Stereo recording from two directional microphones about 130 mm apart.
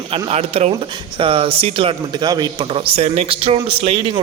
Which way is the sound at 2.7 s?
50° right (ahead or behind).